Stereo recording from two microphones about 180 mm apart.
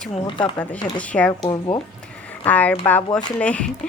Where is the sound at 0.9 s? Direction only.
5° left (ahead or behind).